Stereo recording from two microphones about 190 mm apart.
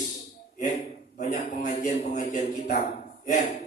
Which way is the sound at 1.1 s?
45° left (ahead or behind).